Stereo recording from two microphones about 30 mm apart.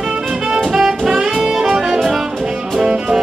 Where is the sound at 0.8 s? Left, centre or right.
Centre.